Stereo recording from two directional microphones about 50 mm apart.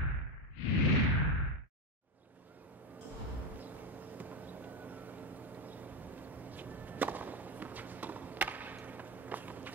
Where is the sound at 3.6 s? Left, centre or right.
Right.